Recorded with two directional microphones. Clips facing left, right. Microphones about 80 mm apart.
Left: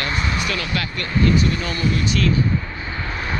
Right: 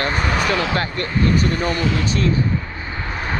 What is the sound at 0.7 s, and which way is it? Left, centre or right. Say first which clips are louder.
Speech: right 2 dB; right.